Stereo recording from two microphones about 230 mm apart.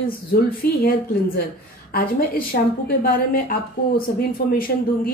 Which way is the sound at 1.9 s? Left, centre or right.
Left.